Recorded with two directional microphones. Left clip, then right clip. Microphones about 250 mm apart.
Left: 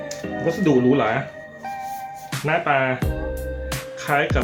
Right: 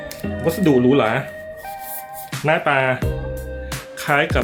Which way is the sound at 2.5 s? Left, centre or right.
Right.